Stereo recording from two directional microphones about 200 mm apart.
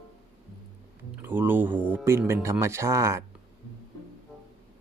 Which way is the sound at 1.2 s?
10° right (ahead or behind).